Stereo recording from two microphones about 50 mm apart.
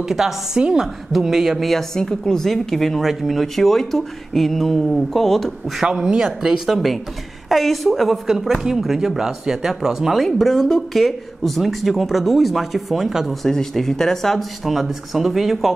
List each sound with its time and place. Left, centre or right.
0.2 s a woman's voice: centre
1.1 s speech: centre
1.6 s speech: centre
5.9 s speech: centre
6.6 s speech: centre
13.3 s speech: centre